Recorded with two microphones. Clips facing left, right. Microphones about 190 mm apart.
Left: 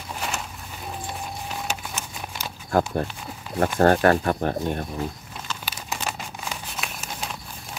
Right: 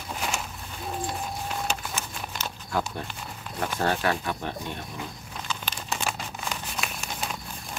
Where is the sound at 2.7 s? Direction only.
50° left (ahead or behind).